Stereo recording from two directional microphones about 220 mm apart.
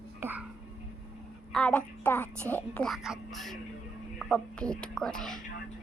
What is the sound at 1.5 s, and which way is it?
A woman's voice, 5° left (ahead or behind).